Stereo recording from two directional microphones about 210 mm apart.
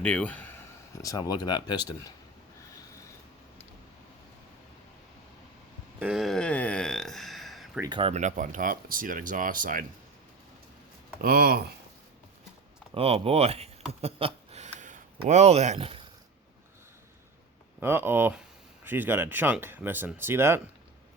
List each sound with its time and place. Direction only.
0.0 s speech: 5° left (ahead or behind)
6.0 s a sound: 5° right (ahead or behind)
7.8 s speech: 20° right (ahead or behind); by 9.8 s 40° right (ahead or behind)
11.2 s speech: 45° right (ahead or behind)
12.9 s speech: 30° right (ahead or behind)
14.0 s a sound: 25° right (ahead or behind)
17.7 s speech: 10° right (ahead or behind)